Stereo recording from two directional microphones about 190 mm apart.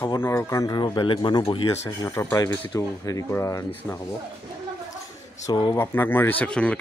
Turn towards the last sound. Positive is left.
turn(degrees=5)  # may be behind; listen again after turning